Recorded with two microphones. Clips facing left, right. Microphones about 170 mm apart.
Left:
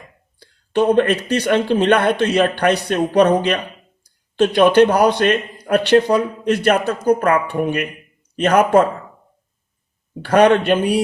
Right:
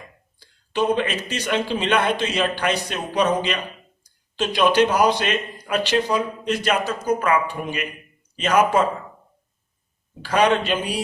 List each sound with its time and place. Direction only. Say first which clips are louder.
0.3 s speech: left 6 dB; 60° left (ahead or behind)
10.2 s speech: left 6 dB; 60° left (ahead or behind)